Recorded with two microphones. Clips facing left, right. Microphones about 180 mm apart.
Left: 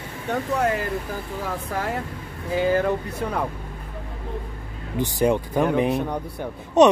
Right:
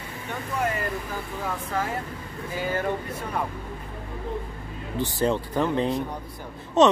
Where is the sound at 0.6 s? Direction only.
90° left.